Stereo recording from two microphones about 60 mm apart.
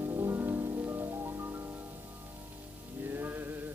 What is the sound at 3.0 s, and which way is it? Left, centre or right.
Music, right.